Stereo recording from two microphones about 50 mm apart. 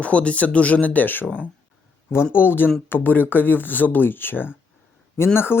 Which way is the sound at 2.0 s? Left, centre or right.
Left.